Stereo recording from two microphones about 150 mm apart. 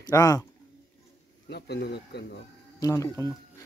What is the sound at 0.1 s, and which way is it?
Speech, 20° left (ahead or behind).